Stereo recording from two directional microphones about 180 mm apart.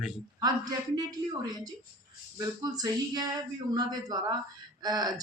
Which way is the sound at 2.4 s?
20° right (ahead or behind).